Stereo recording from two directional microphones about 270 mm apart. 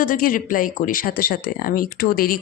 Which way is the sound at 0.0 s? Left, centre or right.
Left.